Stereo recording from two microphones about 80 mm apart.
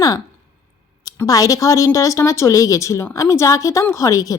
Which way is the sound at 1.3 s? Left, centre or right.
Left.